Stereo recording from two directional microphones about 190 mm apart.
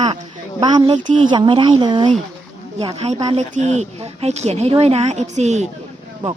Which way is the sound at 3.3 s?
35° right (ahead or behind).